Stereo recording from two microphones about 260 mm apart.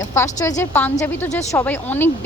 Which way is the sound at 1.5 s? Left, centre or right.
Centre.